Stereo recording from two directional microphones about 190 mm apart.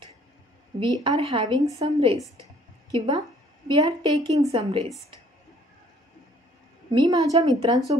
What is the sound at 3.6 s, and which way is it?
A woman's voice, 30° right (ahead or behind).